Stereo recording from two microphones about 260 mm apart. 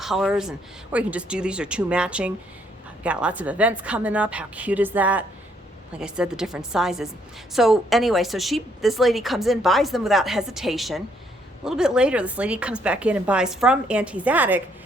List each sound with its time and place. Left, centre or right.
0.0 s speech: centre